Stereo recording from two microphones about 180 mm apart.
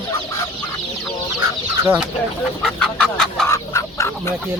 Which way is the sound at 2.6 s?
5° left (ahead or behind).